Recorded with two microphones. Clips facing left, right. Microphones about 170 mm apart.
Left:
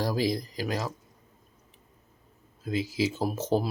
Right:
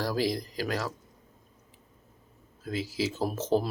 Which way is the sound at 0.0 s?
15° left (ahead or behind).